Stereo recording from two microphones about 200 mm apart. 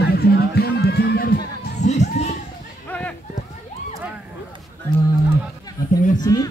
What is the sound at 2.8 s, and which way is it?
Run, 10° left (ahead or behind).